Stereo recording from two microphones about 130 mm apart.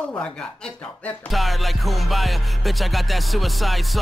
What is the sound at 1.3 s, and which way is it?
Music, centre (ahead or behind).